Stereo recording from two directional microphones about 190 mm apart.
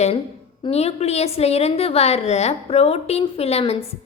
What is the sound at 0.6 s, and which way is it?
A woman's voice, 35° left (ahead or behind).